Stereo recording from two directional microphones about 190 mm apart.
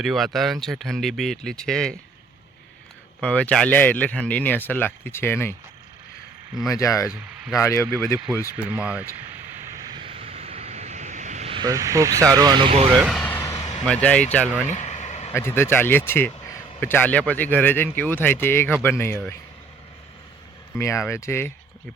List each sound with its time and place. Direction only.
0.0 s speech: centre (ahead or behind)
3.2 s speech: 5° left (ahead or behind)
6.7 s speech: 15° left (ahead or behind)
7.1 s speech: 5° right (ahead or behind)
7.6 s speech: 15° left (ahead or behind)
8.7 s speech: 5° right (ahead or behind)
9.9 s vehicle: 30° right (ahead or behind)
13.0 s speech: centre (ahead or behind)
13.3 s a sound: 15° left (ahead or behind)
13.8 s speech: 5° left (ahead or behind)
14.7 s vehicle: 35° left (ahead or behind)
15.3 s speech: 15° left (ahead or behind)
20.7 s speech: 15° left (ahead or behind)